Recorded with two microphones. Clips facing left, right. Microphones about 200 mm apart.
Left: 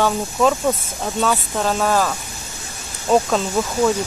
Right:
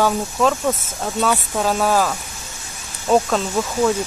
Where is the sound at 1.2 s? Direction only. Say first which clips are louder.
Even; 10° right (ahead or behind).